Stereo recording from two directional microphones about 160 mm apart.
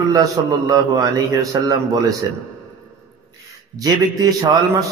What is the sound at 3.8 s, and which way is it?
Speech, 20° right (ahead or behind).